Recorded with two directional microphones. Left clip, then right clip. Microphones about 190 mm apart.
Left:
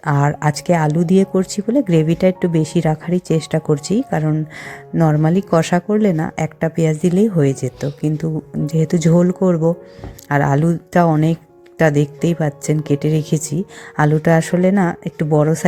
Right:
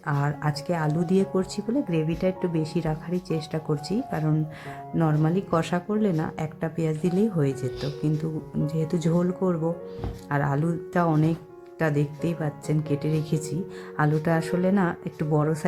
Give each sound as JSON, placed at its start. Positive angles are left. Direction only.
{"t": 0.0, "sound": "a woman's voice", "side_deg": 35}